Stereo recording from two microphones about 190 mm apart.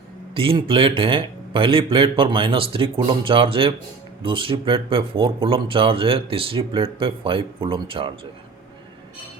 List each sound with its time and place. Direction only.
0.3 s speech: 30° right (ahead or behind)